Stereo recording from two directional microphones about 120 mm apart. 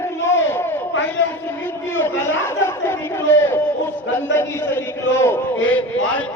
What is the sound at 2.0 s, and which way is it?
Chatter, 20° left (ahead or behind).